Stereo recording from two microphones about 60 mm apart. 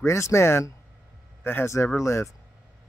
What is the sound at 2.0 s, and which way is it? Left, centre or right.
Speech, left.